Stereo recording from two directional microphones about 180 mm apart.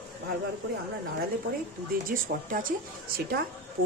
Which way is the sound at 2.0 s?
50° right (ahead or behind).